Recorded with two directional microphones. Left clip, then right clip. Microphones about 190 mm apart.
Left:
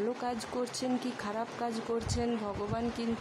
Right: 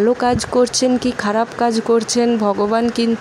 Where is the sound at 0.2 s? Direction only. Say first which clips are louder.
Right 19 dB; 30° right (ahead or behind).